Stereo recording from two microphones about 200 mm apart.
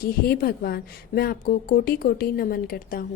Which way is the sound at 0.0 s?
50° left (ahead or behind).